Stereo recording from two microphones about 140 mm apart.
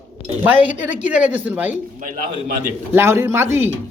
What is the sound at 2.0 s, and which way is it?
Speech, 80° right.